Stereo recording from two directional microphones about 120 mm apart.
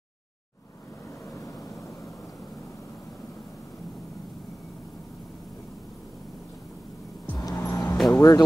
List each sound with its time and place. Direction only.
1.3 s vehicle: 25° left (ahead or behind)
7.3 s vehicle: 25° left (ahead or behind)
8.2 s speech: 25° left (ahead or behind)